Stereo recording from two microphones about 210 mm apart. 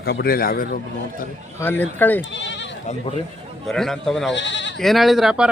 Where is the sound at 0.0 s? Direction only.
50° left (ahead or behind).